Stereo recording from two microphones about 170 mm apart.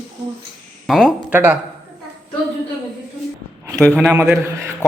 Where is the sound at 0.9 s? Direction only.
5° right (ahead or behind).